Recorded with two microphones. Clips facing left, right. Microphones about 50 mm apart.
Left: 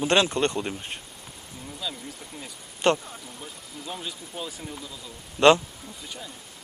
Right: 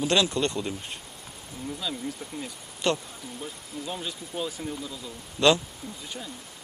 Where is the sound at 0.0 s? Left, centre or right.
Left.